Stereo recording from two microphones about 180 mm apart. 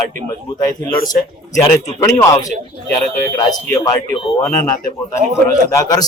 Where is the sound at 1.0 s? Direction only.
20° left (ahead or behind).